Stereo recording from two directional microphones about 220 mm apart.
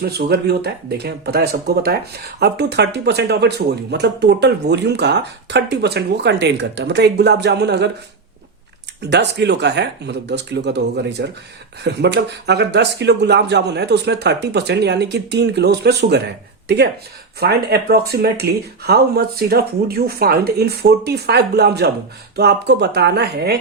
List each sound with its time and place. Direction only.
0.0 s speech: 45° right (ahead or behind)
9.0 s speech: 50° right (ahead or behind)